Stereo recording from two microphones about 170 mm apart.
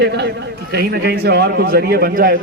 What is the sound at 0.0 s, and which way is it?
A man's voice, 80° right.